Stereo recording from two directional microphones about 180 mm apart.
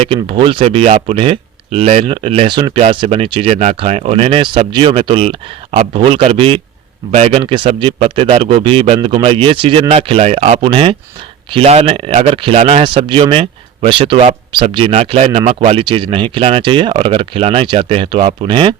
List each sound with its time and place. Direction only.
0.0 s speech: 30° right (ahead or behind)